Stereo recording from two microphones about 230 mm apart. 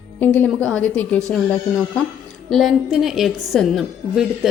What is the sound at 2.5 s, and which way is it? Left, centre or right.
A woman's voice, centre.